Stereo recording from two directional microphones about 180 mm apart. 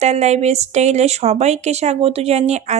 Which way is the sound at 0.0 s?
40° right (ahead or behind).